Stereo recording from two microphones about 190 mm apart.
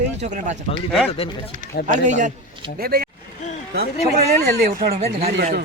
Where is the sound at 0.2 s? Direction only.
40° right (ahead or behind).